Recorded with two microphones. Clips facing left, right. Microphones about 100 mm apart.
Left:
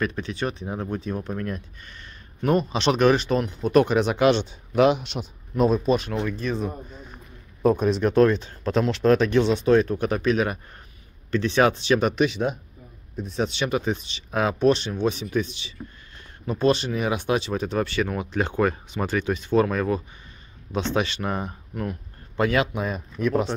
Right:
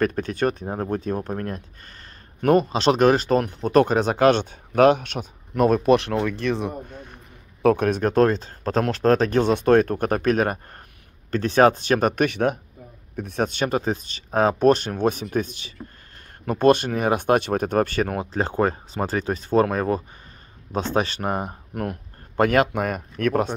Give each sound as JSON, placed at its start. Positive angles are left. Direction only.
{"t": 0.0, "sound": "speech", "side_deg": -45}
{"t": 2.4, "sound": "speech", "side_deg": -55}
{"t": 2.7, "sound": "speech", "side_deg": -35}
{"t": 8.0, "sound": "speech", "side_deg": -40}
{"t": 18.2, "sound": "speech", "side_deg": -35}
{"t": 21.7, "sound": "speech", "side_deg": -60}